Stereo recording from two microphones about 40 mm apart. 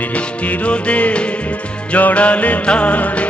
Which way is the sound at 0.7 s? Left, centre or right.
Left.